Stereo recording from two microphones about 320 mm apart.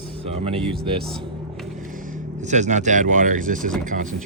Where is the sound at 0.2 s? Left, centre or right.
Centre.